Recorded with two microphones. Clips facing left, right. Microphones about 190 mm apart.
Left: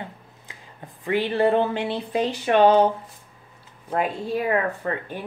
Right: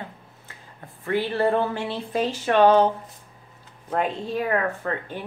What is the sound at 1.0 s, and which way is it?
Speech, 15° left (ahead or behind).